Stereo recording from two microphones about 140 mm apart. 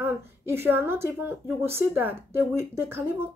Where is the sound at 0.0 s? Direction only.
15° right (ahead or behind).